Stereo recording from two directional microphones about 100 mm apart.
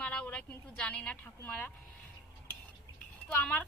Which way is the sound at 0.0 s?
10° left (ahead or behind).